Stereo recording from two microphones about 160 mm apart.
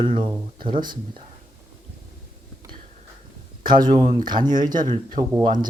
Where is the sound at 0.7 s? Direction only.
60° right (ahead or behind).